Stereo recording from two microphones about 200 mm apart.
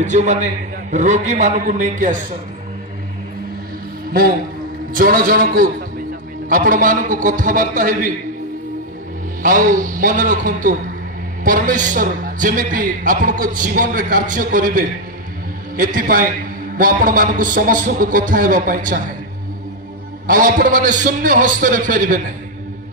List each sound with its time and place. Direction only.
0.0 s a man's voice: 35° right (ahead or behind)
4.9 s a man's voice: 45° right (ahead or behind)
9.4 s a man's voice: 40° right (ahead or behind)
20.2 s a man's voice: 40° right (ahead or behind)